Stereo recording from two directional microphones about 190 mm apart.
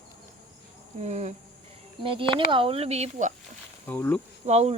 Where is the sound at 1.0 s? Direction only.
35° right (ahead or behind).